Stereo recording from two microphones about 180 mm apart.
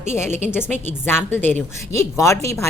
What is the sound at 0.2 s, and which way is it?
Speech, 15° left (ahead or behind).